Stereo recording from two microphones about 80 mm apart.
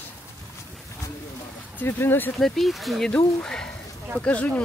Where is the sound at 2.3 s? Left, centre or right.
Centre.